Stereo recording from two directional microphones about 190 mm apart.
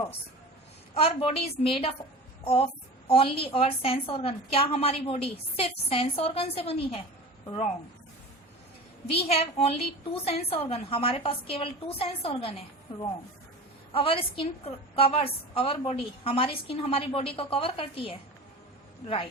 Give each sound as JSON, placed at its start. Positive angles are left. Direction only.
{"t": 0.9, "sound": "a woman's voice", "side_deg": 30}
{"t": 9.1, "sound": "a woman's voice", "side_deg": 30}
{"t": 13.9, "sound": "a woman's voice", "side_deg": 30}